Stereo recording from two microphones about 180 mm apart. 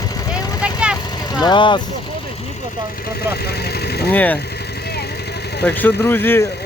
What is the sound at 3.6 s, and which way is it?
Vehicle, 60° left (ahead or behind).